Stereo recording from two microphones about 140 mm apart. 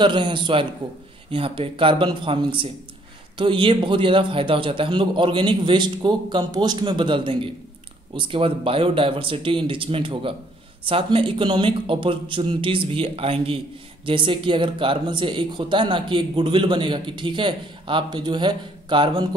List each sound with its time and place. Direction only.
0.0 s speech: 35° right (ahead or behind)